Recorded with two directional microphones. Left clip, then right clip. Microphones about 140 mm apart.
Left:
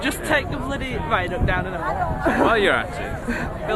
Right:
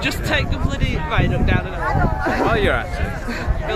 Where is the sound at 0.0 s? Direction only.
30° left (ahead or behind).